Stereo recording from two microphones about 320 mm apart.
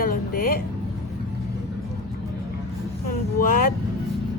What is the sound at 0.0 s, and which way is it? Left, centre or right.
Music, left.